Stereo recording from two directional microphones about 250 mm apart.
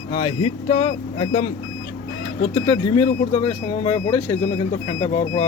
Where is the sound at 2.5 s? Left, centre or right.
Left.